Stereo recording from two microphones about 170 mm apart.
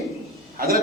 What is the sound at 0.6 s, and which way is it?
Speech, 60° right (ahead or behind).